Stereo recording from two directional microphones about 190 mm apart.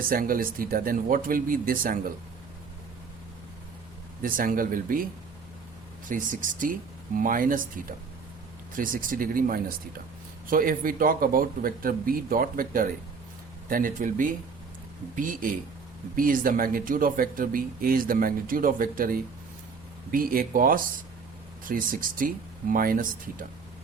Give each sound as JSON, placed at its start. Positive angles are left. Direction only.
{"t": 0.1, "sound": "speech", "side_deg": -50}
{"t": 4.2, "sound": "speech", "side_deg": -45}
{"t": 6.1, "sound": "speech", "side_deg": -45}